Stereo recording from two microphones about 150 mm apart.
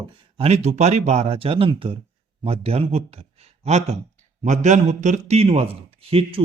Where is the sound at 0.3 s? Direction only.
45° right (ahead or behind).